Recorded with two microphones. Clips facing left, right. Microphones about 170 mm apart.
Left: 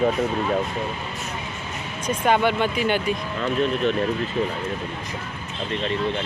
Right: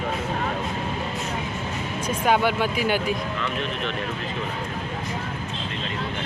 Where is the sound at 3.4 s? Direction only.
40° left (ahead or behind).